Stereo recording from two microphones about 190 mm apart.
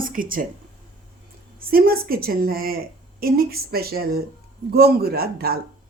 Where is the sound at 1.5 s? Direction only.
50° right (ahead or behind).